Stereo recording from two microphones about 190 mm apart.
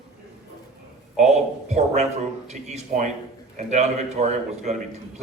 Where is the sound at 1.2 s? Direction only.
35° right (ahead or behind).